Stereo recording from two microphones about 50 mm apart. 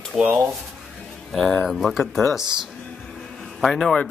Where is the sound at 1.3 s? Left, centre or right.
Centre.